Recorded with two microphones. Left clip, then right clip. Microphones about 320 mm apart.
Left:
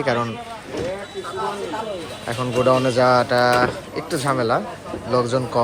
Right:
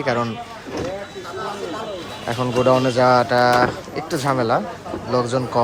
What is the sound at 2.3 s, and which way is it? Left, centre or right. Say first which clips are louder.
Speech: right 1 dB; centre.